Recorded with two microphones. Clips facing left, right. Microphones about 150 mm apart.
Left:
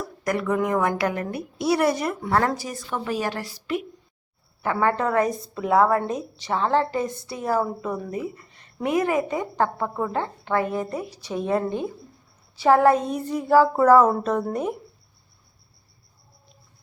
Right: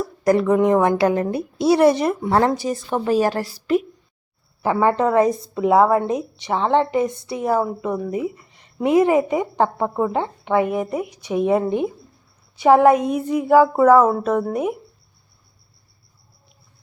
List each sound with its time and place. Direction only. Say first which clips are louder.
0.3 s a woman's voice: right 8 dB; 30° right (ahead or behind)
4.6 s a woman's voice: right 5 dB; 25° right (ahead or behind)